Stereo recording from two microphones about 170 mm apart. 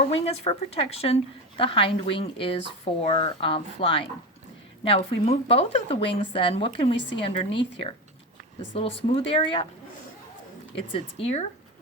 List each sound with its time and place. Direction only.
0.1 s a woman's voice: 35° left (ahead or behind)
10.8 s a woman's voice: 35° left (ahead or behind)